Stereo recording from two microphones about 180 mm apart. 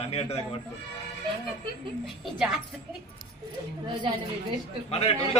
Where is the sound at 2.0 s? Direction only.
Centre (ahead or behind).